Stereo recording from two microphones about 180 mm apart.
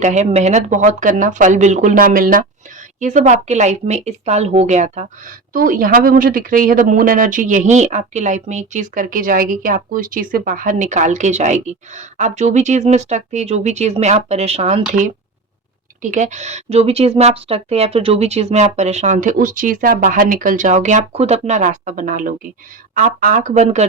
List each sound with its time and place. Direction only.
0.0 s a woman's voice: 40° right (ahead or behind)